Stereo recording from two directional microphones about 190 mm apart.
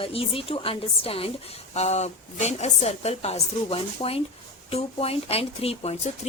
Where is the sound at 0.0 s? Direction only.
30° left (ahead or behind).